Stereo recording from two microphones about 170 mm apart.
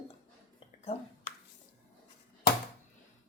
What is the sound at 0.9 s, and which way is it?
Speech, 35° left (ahead or behind).